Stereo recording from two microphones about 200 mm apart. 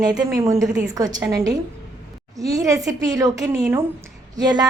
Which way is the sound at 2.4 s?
15° right (ahead or behind).